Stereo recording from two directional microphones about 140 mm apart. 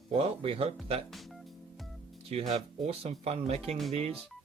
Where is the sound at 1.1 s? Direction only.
Centre (ahead or behind).